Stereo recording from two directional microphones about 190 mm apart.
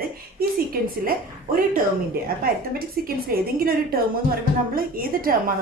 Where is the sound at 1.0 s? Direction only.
50° right (ahead or behind).